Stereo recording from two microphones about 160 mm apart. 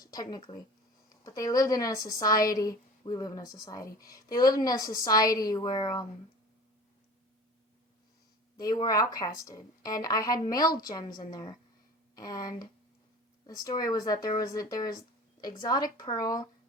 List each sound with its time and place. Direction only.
0.0 s a woman's voice: 25° left (ahead or behind)
8.5 s a woman's voice: 25° left (ahead or behind)
13.7 s a woman's voice: 25° left (ahead or behind)